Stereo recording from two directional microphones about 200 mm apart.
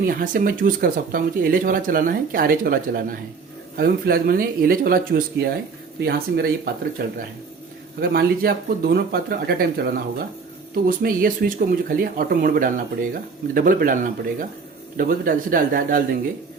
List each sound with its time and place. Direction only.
0.0 s speech: 45° right (ahead or behind)